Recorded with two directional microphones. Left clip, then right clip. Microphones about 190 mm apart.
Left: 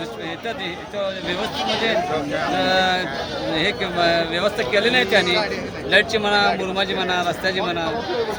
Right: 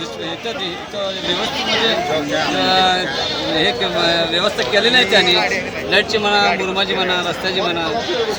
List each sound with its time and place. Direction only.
2.6 s speech: 5° left (ahead or behind)
5.2 s speech: 70° left (ahead or behind)
5.9 s speech: centre (ahead or behind)